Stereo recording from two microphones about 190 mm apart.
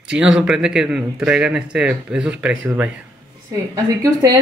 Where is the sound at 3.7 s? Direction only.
15° right (ahead or behind).